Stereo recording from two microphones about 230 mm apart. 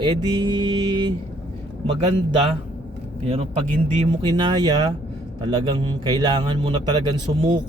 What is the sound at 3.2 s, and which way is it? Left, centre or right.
Speech, right.